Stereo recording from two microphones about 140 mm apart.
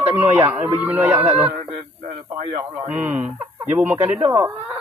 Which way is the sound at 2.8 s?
10° right (ahead or behind).